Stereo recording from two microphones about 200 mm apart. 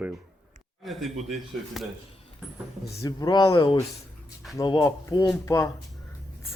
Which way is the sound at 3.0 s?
20° left (ahead or behind).